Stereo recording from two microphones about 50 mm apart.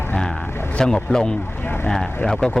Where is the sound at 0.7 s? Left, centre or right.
Centre.